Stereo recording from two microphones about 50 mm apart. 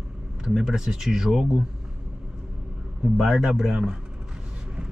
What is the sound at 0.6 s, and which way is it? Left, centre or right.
Speech, centre.